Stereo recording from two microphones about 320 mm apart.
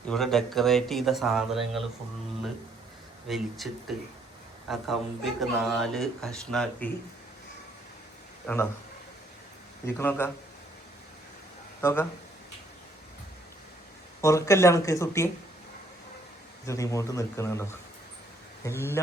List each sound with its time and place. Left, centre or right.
0.1 s speech: centre
3.2 s speech: centre
8.5 s speech: centre
9.8 s speech: centre
11.8 s speech: centre
14.2 s speech: centre
16.6 s speech: centre